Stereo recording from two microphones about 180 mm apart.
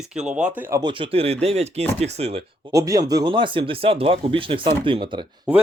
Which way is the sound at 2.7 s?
20° right (ahead or behind).